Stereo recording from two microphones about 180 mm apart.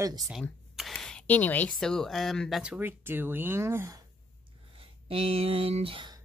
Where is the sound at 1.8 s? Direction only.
Centre (ahead or behind); by 4.0 s 15° right (ahead or behind).